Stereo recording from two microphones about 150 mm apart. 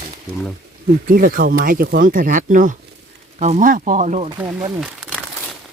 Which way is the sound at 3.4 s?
50° right (ahead or behind).